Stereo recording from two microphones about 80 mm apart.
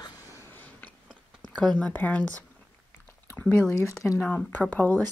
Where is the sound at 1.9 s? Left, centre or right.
Left.